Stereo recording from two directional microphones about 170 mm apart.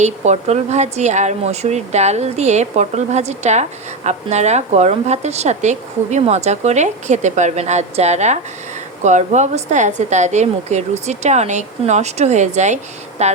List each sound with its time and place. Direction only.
0.0 s a woman's voice: 40° right (ahead or behind)